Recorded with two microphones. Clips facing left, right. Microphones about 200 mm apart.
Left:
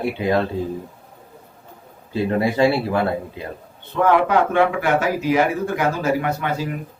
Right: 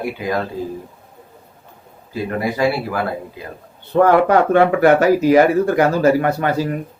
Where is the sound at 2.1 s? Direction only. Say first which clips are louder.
Left 2 dB; 25° left (ahead or behind).